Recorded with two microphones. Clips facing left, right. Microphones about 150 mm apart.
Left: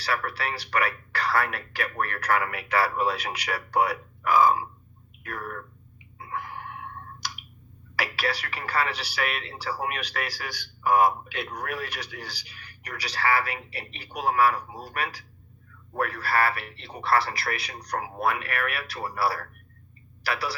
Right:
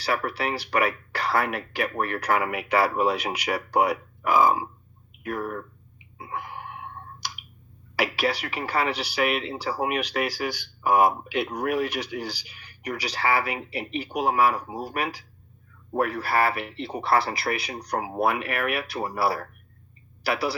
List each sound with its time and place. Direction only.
0.0 s speech: 20° right (ahead or behind)
6.1 s a sound: 25° right (ahead or behind)
7.9 s speech: 25° right (ahead or behind)